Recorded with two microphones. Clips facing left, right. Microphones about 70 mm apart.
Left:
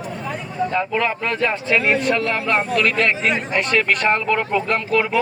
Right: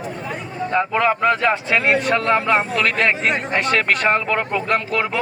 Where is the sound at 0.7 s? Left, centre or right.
Centre.